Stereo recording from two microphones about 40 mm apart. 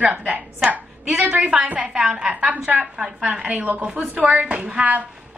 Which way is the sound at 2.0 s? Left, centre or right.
Right.